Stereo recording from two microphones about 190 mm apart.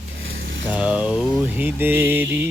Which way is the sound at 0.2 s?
90° right.